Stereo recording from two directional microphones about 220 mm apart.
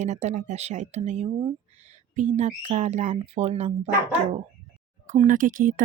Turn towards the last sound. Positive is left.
turn(degrees=-40)  # may be behind; listen again after turning